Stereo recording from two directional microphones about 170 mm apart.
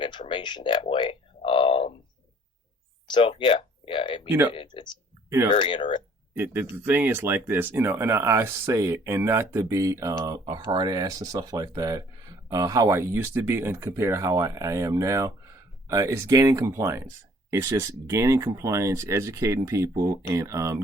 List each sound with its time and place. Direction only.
0.0 s speech: 30° left (ahead or behind)
1.4 s a sound: 30° left (ahead or behind)
3.1 s speech: 30° left (ahead or behind)
4.3 s speech: 10° right (ahead or behind)
4.5 s speech: 30° left (ahead or behind)
6.3 s speech: 10° right (ahead or behind)